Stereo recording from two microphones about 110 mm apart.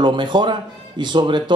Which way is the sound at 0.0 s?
45° right (ahead or behind).